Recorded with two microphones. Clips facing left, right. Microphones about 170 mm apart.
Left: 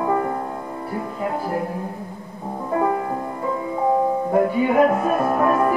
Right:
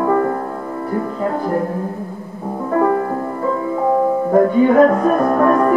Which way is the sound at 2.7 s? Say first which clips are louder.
Right 5 dB; 45° right (ahead or behind).